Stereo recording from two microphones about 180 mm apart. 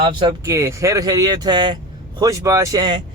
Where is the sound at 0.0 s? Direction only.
25° right (ahead or behind).